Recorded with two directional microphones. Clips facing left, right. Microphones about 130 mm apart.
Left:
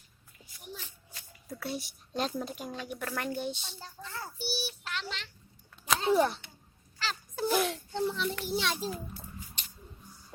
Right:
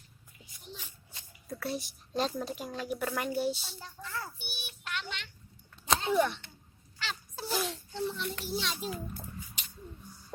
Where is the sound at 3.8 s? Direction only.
25° left (ahead or behind).